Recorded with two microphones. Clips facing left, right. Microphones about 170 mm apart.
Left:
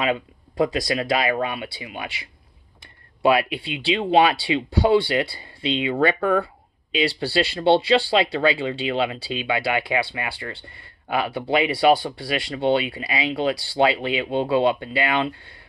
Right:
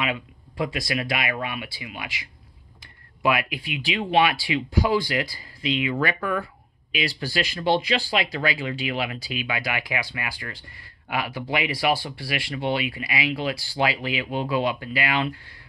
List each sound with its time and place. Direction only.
0.0 s speech: 35° left (ahead or behind)